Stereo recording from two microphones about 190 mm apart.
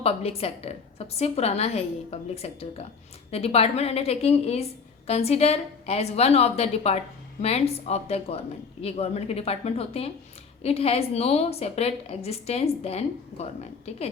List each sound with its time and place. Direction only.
0.0 s a woman's voice: 30° left (ahead or behind)